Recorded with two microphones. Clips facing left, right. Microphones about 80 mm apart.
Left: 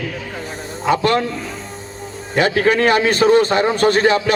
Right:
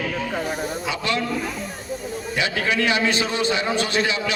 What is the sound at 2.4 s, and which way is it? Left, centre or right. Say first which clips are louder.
A man's voice: left 9 dB; left.